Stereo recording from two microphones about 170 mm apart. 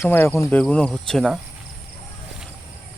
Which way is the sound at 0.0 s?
15° left (ahead or behind).